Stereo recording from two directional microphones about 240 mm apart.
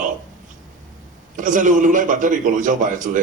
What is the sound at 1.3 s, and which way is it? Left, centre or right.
A man's voice, right.